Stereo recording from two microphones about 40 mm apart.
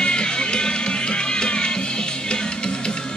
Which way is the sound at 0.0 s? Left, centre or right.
Left.